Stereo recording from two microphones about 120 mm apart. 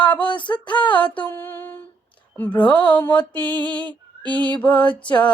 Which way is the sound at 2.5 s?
40° left (ahead or behind).